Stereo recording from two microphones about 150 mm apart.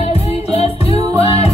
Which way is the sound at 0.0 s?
40° left (ahead or behind).